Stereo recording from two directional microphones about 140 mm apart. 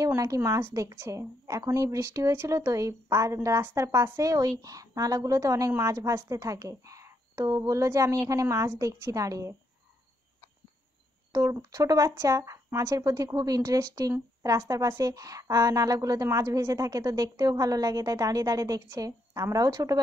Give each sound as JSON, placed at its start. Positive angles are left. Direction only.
{"t": 0.0, "sound": "speech", "side_deg": -25}
{"t": 11.5, "sound": "speech", "side_deg": -25}